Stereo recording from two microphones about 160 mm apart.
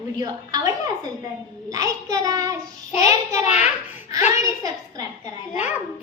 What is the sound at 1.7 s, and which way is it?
Child singing, 20° right (ahead or behind).